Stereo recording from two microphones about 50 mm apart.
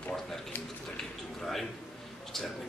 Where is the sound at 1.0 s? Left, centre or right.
Centre.